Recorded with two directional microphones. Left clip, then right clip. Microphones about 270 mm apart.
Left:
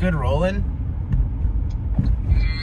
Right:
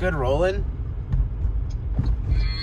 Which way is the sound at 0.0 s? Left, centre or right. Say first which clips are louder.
Right 1 dB; right.